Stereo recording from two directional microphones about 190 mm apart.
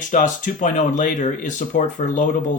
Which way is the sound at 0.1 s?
45° left (ahead or behind).